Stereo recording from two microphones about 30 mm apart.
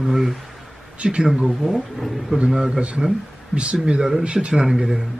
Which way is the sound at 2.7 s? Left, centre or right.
Right.